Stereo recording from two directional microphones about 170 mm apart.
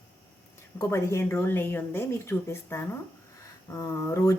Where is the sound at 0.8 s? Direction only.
15° left (ahead or behind).